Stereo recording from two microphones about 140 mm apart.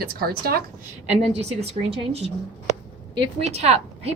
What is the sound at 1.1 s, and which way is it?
Speech, 50° right (ahead or behind).